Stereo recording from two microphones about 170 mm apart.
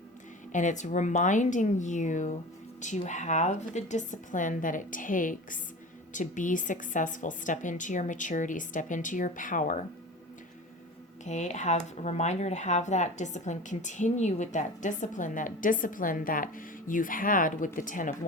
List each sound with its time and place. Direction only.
0.5 s speech: 45° left (ahead or behind)
11.3 s speech: 45° left (ahead or behind)